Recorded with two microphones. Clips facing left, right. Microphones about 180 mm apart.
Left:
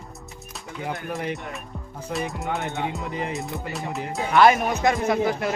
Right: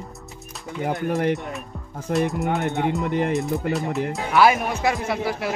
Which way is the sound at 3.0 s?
60° right (ahead or behind).